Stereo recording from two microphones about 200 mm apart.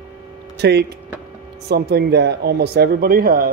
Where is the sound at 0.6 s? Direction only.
55° right (ahead or behind).